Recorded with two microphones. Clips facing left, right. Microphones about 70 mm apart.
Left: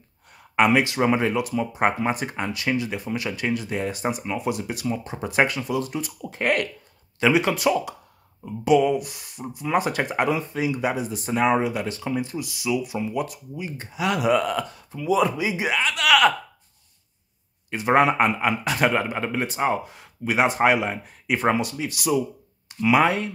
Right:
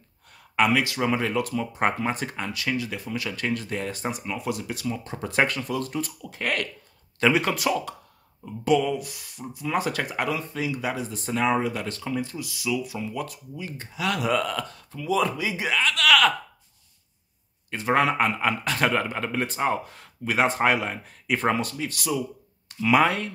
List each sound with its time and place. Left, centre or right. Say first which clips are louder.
0.3 s speech: left 3 dB; left
6.2 s speech: left 8 dB; left
7.2 s speech: left 2 dB; centre
17.6 s speech: left 4 dB; centre
18.4 s speech: left 2 dB; centre